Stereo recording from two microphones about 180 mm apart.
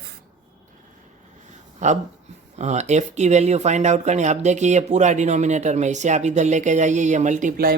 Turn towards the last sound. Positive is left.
turn(degrees=-50)  # may be behind; listen again after turning